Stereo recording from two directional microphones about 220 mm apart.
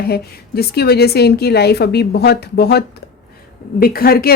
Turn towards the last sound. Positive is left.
turn(degrees=45)  # may be behind; listen again after turning